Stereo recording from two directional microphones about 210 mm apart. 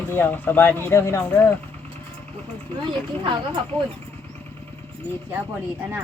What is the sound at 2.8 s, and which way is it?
Speech, 25° right (ahead or behind).